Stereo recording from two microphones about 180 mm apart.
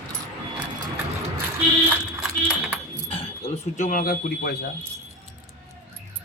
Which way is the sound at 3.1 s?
35° left (ahead or behind).